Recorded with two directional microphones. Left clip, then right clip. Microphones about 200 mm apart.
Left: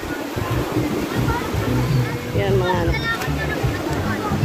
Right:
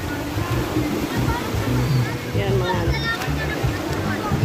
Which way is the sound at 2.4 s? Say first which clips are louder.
Left 3 dB; 20° left (ahead or behind).